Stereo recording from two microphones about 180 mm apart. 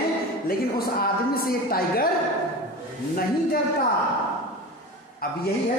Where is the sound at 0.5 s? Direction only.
55° left (ahead or behind).